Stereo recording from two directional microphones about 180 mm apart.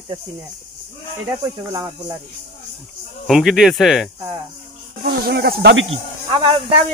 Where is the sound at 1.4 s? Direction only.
25° right (ahead or behind).